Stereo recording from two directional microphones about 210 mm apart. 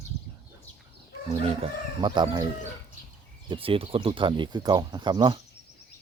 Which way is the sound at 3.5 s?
25° right (ahead or behind).